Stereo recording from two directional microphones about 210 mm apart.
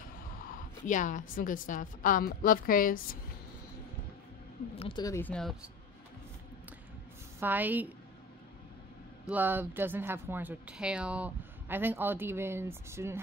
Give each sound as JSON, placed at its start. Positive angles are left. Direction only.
{"t": 0.5, "sound": "a woman's voice", "side_deg": 40}
{"t": 4.7, "sound": "speech", "side_deg": 20}
{"t": 7.3, "sound": "speech", "side_deg": -10}
{"t": 9.3, "sound": "speech", "side_deg": -10}